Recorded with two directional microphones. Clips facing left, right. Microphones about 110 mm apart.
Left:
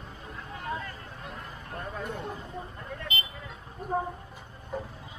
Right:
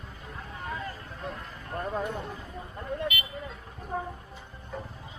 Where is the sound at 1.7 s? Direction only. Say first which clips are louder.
Right 6 dB; 30° right (ahead or behind).